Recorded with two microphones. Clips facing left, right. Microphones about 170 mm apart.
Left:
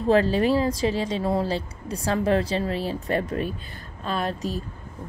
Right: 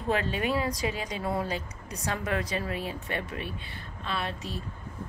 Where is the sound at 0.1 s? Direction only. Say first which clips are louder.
Left 8 dB; 35° left (ahead or behind).